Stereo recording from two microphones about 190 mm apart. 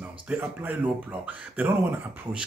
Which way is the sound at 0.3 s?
10° right (ahead or behind).